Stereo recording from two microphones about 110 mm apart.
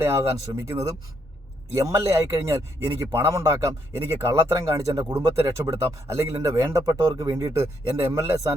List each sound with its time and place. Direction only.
0.0 s a man's voice: 25° right (ahead or behind)